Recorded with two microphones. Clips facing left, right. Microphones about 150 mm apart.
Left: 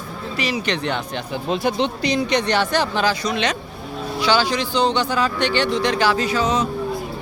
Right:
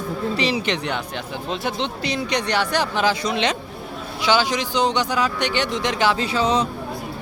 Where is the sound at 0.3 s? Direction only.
30° right (ahead or behind).